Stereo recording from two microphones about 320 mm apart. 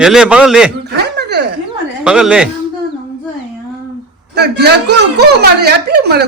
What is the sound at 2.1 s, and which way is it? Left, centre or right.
Speech, centre.